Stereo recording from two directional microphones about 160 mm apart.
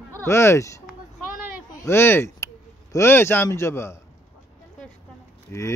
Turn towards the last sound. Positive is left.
turn(degrees=20)  # may be behind; listen again after turning